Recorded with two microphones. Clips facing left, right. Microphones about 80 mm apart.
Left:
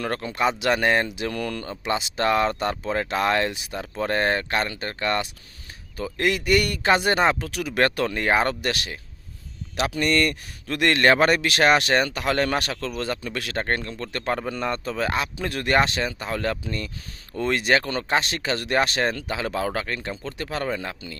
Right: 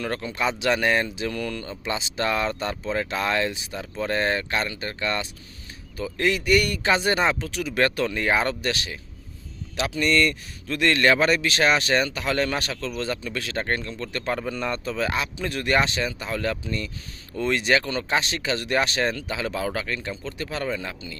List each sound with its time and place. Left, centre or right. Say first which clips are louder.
0.0 s speech: left 2 dB; left
1.1 s speech: left 1 dB; left